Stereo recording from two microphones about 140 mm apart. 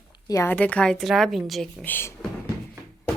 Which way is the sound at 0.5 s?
10° left (ahead or behind).